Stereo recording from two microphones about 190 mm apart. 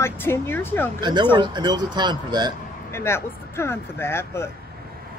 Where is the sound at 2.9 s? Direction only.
15° left (ahead or behind).